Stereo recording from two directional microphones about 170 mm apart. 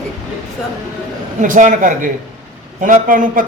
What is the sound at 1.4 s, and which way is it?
A man's voice, 50° right (ahead or behind).